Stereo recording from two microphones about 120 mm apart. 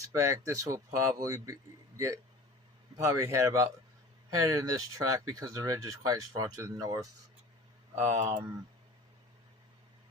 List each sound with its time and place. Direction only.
0.1 s speech: 25° right (ahead or behind)
3.0 s speech: 25° right (ahead or behind)